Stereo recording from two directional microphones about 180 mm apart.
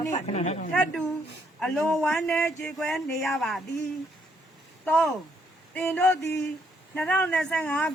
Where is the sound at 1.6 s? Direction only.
Centre (ahead or behind).